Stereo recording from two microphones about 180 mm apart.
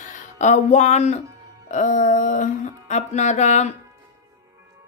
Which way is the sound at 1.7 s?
45° left (ahead or behind).